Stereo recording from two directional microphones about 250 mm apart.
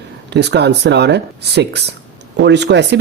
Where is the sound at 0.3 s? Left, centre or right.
Right.